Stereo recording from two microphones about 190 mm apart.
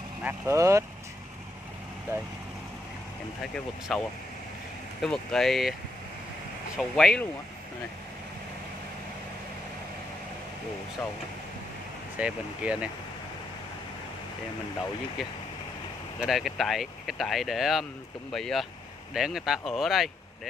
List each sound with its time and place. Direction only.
0.2 s speech: 10° right (ahead or behind)
3.9 s speech: centre (ahead or behind)
6.8 s speech: centre (ahead or behind)
12.2 s speech: 5° right (ahead or behind)
16.2 s speech: centre (ahead or behind)